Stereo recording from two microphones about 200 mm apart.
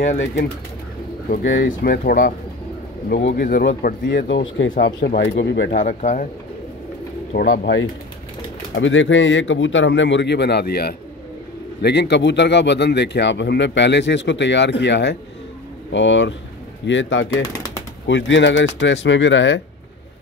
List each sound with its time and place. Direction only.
0.0 s speech: 35° left (ahead or behind)
1.6 s speech: 45° left (ahead or behind)
4.3 s speech: 70° left (ahead or behind)
4.7 s speech: 50° left (ahead or behind)
5.7 s speech: 40° left (ahead or behind)
7.3 s speech: 50° left (ahead or behind)
8.7 s speech: 70° left (ahead or behind)